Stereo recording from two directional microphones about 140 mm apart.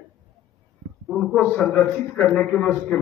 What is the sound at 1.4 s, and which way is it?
A man's voice, 10° left (ahead or behind).